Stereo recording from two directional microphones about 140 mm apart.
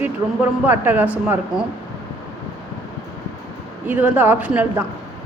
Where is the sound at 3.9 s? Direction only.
10° right (ahead or behind).